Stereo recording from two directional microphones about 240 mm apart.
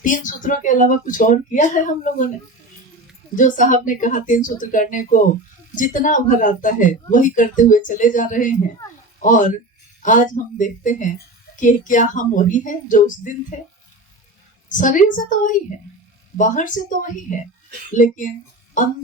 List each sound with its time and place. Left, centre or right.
0.0 s speech: left
3.3 s speech: left
14.7 s speech: left
17.9 s speech: left